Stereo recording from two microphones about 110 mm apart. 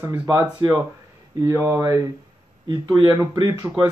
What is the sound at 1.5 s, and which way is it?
Speech, 20° right (ahead or behind).